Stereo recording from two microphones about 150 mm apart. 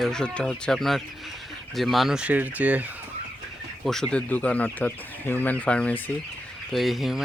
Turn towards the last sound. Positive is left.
turn(degrees=0)  # may be behind; listen again after turning